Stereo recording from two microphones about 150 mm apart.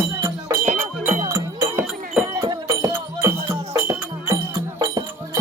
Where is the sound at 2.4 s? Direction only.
25° right (ahead or behind).